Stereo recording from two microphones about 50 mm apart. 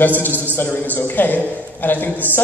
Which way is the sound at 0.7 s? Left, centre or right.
Left.